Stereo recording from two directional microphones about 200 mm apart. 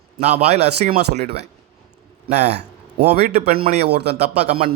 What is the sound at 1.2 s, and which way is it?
Speech, 55° right (ahead or behind).